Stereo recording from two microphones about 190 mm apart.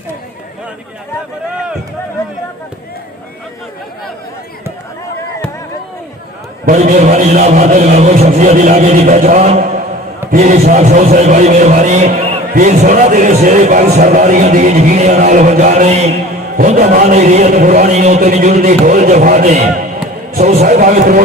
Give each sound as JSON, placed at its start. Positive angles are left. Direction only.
{"t": 6.7, "sound": "a man's voice", "side_deg": -45}